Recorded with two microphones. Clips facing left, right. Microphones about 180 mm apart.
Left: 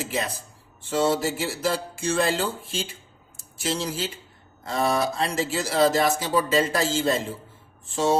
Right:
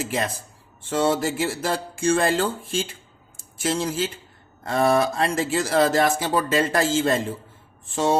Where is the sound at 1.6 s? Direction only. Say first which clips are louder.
Even; 50° right (ahead or behind).